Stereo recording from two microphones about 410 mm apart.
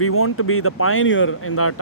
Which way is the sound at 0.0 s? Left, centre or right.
Left.